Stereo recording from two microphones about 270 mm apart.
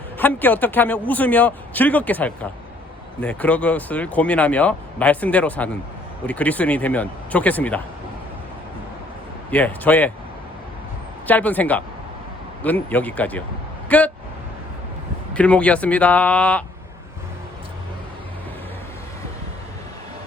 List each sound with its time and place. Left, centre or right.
0.2 s a man's voice: centre
9.5 s speech: centre
11.3 s speech: centre
15.4 s speech: centre